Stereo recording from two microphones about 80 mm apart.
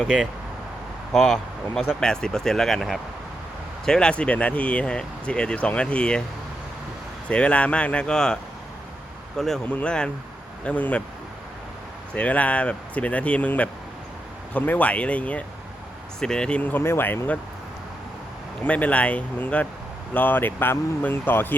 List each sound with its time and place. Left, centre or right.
1.1 s speech: centre
7.3 s speech: centre
9.6 s speech: centre
12.1 s speech: centre
18.6 s speech: centre